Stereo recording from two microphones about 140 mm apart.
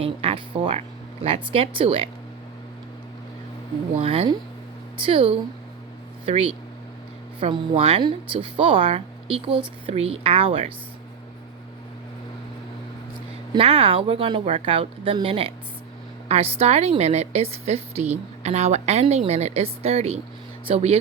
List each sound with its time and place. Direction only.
0.0 s speech: 45° right (ahead or behind)
4.0 s speech: 45° right (ahead or behind)
13.5 s speech: 45° right (ahead or behind)